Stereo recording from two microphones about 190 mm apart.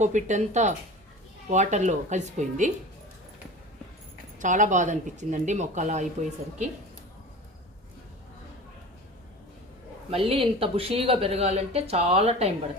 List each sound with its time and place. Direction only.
0.0 s speech: 40° right (ahead or behind)
4.4 s speech: 40° right (ahead or behind)
10.1 s speech: 30° right (ahead or behind)